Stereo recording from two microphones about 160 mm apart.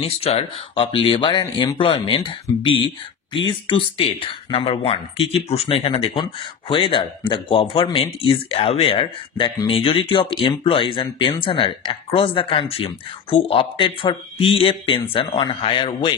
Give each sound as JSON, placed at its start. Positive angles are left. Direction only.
{"t": 0.0, "sound": "speech", "side_deg": 35}